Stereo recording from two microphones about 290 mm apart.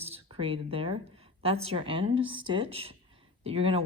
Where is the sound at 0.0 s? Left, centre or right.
Right.